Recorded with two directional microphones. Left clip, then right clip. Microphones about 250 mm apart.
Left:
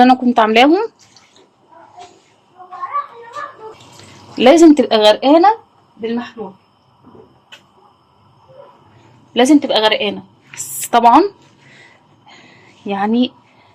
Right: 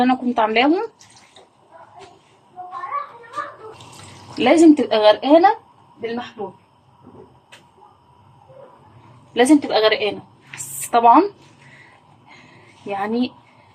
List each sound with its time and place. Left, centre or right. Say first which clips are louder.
0.0 s speech: left 7 dB; left
4.4 s speech: left 5 dB; left
9.3 s a woman's voice: left 3 dB; left
12.9 s a woman's voice: left 6 dB; left